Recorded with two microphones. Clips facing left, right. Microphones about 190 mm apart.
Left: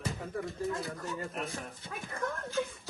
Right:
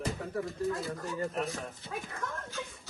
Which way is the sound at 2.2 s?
55° left (ahead or behind).